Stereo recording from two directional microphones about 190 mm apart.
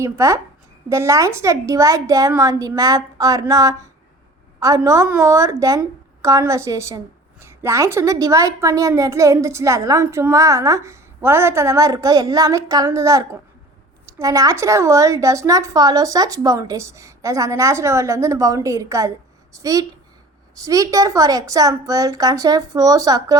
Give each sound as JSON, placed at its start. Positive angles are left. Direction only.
{"t": 0.0, "sound": "a woman's voice", "side_deg": -15}